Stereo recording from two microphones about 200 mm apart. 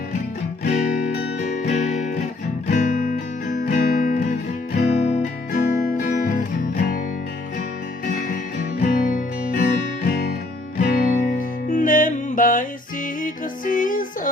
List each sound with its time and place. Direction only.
1.6 s music: 40° left (ahead or behind)
8.0 s music: 40° left (ahead or behind)